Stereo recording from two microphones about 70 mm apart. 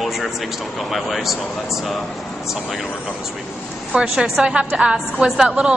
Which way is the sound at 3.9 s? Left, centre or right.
Centre.